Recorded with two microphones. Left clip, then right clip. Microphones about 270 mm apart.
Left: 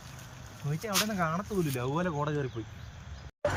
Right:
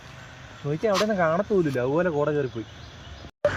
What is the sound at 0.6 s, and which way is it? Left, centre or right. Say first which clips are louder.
Speech: right 9 dB; right.